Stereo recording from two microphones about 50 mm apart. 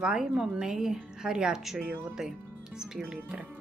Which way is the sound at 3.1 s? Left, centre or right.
Right.